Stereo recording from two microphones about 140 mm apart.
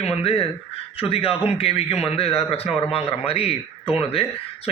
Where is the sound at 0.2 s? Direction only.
45° left (ahead or behind).